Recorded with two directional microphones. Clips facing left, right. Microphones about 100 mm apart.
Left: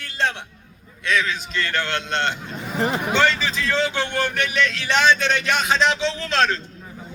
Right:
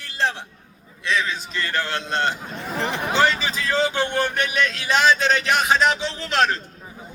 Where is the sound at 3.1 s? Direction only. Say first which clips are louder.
Right 3 dB; 10° right (ahead or behind).